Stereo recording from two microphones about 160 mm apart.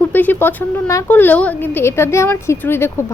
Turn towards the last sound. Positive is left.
turn(degrees=15)  # may be behind; listen again after turning